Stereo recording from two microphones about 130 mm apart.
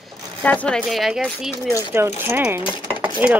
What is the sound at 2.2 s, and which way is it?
Speech, 15° right (ahead or behind).